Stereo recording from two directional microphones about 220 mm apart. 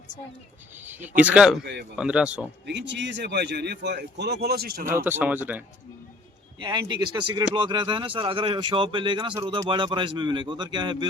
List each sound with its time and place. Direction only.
0.8 s speech: 10° right (ahead or behind)
1.6 s a man's voice: 50° right (ahead or behind)
2.0 s speech: 5° right (ahead or behind)
2.6 s a man's voice: 55° right (ahead or behind)
5.0 s speech: 10° right (ahead or behind)
6.6 s speech: 20° right (ahead or behind)